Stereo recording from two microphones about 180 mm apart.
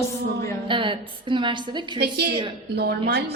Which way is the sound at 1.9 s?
65° right (ahead or behind).